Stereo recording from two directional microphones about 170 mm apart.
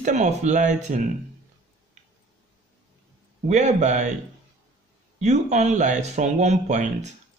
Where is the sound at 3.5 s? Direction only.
45° right (ahead or behind).